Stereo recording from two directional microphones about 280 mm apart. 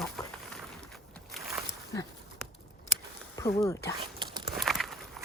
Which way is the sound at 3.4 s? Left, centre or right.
Centre.